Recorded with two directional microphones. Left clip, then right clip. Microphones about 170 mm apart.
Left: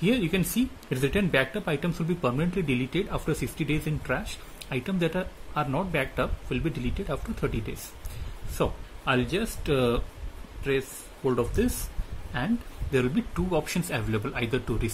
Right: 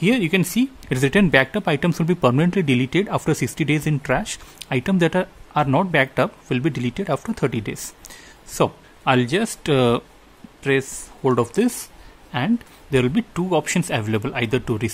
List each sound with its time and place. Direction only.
0.0 s speech: 45° right (ahead or behind)
12.9 s speech: 45° right (ahead or behind)